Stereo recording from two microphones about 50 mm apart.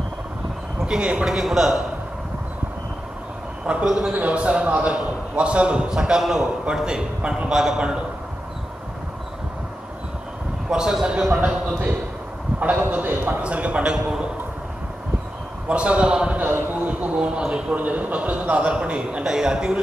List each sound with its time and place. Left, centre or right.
0.8 s a man's voice: centre
3.6 s a man's voice: centre
4.1 s a man's voice: right
10.7 s a man's voice: centre
11.4 s a man's voice: right
12.8 s a man's voice: right
13.4 s a man's voice: right
13.9 s a man's voice: centre
15.7 s a man's voice: right
16.3 s a man's voice: right; by 17.7 s centre
17.7 s a man's voice: right; by 19.8 s centre